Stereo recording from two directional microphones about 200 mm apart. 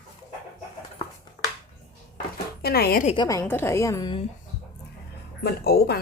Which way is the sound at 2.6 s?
50° left (ahead or behind).